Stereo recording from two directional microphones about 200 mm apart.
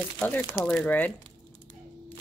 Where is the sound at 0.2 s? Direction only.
10° left (ahead or behind).